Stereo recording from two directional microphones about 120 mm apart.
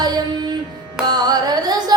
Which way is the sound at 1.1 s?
35° right (ahead or behind).